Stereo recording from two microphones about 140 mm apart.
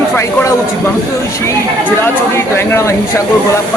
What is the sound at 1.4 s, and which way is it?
A man's voice, 15° left (ahead or behind).